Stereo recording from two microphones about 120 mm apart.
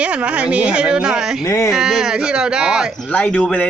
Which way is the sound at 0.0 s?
10° right (ahead or behind).